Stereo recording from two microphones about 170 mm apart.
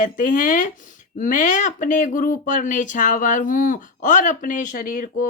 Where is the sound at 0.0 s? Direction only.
50° left (ahead or behind).